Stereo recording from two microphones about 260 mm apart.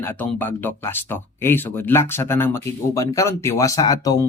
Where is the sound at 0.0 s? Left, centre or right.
Centre.